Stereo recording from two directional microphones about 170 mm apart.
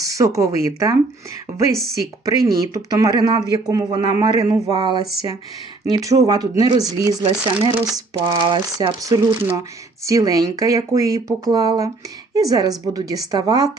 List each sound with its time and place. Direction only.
0.0 s speech: 20° right (ahead or behind)
2.0 s speech: 20° right (ahead or behind)
7.2 s speech: 30° right (ahead or behind)